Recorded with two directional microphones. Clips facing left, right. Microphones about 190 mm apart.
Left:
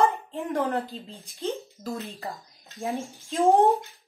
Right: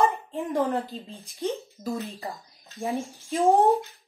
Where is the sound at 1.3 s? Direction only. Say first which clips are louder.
Right 1 dB; 15° right (ahead or behind).